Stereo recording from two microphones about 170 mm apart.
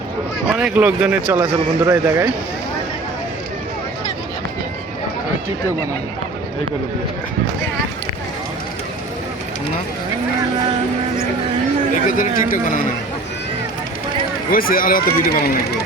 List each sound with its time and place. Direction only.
0.4 s speech: 5° right (ahead or behind)
12.1 s speech: 50° left (ahead or behind)
14.5 s speech: 60° left (ahead or behind)